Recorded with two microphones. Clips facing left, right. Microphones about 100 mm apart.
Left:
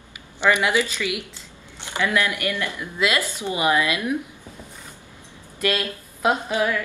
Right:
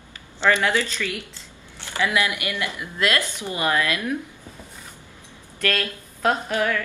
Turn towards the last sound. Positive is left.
turn(degrees=15)  # may be behind; listen again after turning